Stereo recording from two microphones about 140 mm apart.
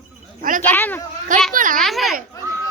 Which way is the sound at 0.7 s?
15° left (ahead or behind).